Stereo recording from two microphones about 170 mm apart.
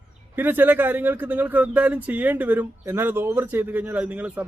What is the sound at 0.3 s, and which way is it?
A man's voice, 10° right (ahead or behind).